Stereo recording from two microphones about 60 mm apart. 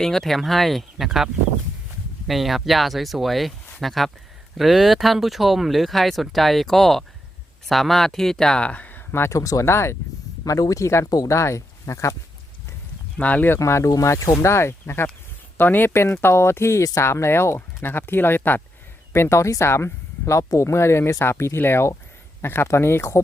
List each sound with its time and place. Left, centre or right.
0.0 s speech: centre; by 9.0 s left
9.3 s speech: left
9.6 s speech: left
10.4 s speech: left
13.1 s speech: left
13.6 s speech: left
14.2 s speech: left
14.5 s speech: left
15.5 s speech: left
15.9 s speech: left
19.1 s speech: left